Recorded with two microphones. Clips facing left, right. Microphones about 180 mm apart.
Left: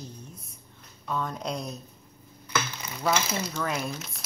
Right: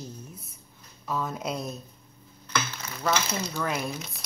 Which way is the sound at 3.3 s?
Centre (ahead or behind).